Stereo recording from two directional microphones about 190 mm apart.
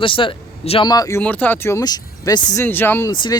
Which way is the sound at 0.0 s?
25° left (ahead or behind).